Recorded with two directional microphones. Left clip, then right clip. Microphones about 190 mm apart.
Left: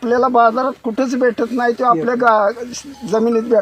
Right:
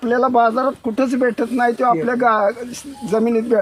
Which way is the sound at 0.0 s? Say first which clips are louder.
Left 2 dB; 15° right (ahead or behind).